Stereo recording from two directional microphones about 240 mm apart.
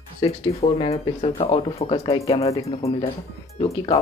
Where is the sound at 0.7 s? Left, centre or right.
Left.